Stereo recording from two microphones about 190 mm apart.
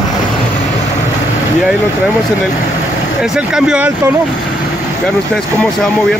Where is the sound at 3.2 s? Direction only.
5° right (ahead or behind).